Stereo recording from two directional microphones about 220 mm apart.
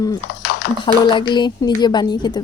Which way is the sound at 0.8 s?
20° left (ahead or behind).